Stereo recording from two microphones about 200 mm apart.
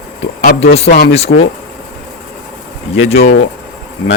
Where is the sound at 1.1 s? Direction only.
30° left (ahead or behind).